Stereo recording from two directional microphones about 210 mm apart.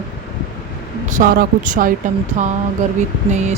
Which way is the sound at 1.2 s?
40° right (ahead or behind).